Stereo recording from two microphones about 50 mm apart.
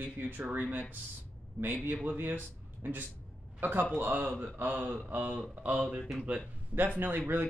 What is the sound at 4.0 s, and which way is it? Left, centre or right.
Speech, right.